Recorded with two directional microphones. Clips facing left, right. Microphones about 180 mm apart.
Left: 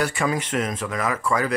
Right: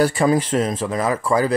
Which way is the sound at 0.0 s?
35° right (ahead or behind).